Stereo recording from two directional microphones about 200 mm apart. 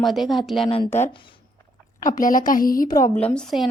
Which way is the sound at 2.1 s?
40° left (ahead or behind).